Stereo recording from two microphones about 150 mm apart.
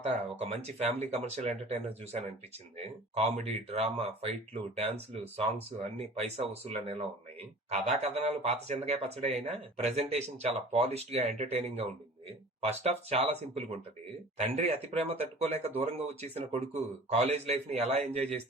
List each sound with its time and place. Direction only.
0.0 s speech: 45° right (ahead or behind)
2.7 s speech: 45° right (ahead or behind)